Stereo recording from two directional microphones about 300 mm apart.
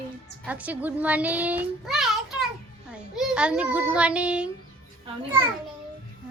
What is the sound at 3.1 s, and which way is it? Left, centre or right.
Child singing, centre.